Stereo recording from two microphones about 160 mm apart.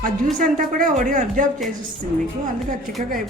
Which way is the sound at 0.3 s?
55° right (ahead or behind).